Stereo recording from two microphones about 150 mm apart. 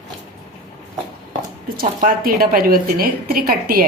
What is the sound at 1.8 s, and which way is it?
A woman's voice, 75° right (ahead or behind).